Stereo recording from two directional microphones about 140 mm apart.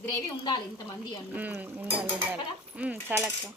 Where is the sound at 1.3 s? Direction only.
10° right (ahead or behind).